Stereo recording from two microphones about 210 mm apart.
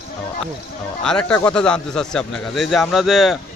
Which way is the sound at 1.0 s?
5° left (ahead or behind).